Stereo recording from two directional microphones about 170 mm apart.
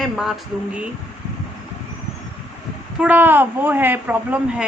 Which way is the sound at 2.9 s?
10° right (ahead or behind).